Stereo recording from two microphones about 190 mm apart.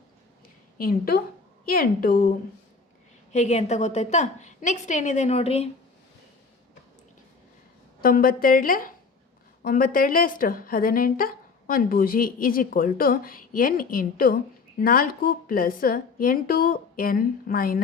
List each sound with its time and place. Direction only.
0.8 s a woman's voice: 50° left (ahead or behind)
3.3 s a woman's voice: 35° left (ahead or behind)
8.0 s a woman's voice: 50° left (ahead or behind)